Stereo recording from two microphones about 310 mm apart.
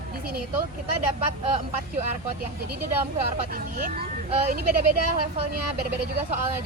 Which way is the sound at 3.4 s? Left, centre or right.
Right.